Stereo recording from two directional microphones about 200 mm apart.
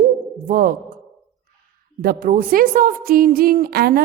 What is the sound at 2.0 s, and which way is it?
A woman's voice, 45° right (ahead or behind).